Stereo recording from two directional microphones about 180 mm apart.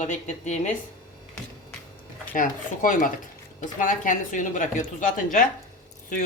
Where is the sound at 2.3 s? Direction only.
50° left (ahead or behind).